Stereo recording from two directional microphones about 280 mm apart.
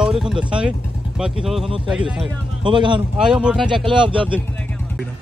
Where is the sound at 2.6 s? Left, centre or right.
Centre.